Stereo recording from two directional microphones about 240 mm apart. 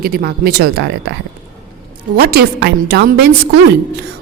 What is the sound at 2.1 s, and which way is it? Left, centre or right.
A woman's voice, right.